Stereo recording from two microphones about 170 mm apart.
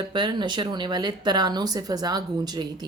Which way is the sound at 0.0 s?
25° right (ahead or behind).